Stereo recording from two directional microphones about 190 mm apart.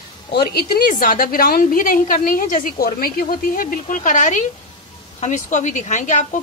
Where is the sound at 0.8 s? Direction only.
50° left (ahead or behind).